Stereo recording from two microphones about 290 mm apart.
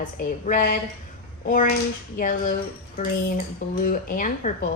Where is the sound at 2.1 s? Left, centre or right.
Left.